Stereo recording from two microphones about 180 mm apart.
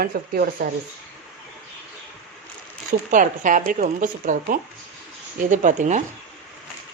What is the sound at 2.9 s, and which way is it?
Speech, 45° right (ahead or behind).